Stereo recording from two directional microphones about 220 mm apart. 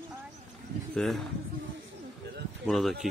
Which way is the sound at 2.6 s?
Centre (ahead or behind).